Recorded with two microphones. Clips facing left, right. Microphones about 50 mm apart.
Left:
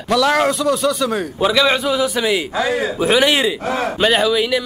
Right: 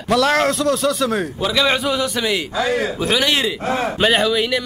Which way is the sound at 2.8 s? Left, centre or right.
Centre.